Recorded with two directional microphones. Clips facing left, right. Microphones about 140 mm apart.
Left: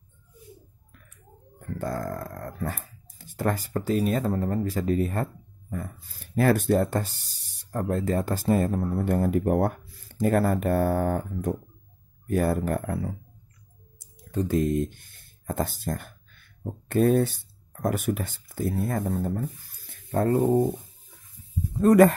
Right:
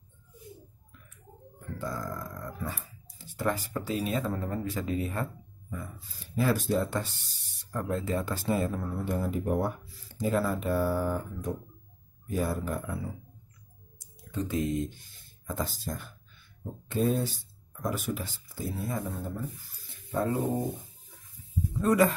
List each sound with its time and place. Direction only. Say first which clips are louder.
1.8 s speech: left 5 dB; 55° left (ahead or behind)
14.3 s speech: left 6 dB; 45° left (ahead or behind)
21.8 s speech: left 7 dB; 55° left (ahead or behind)